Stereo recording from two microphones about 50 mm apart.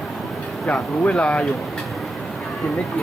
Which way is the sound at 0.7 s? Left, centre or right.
Left.